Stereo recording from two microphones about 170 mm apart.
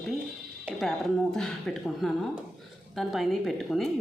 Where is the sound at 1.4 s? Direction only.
Centre (ahead or behind).